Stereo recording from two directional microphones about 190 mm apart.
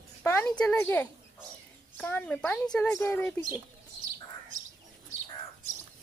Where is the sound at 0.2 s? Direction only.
10° left (ahead or behind).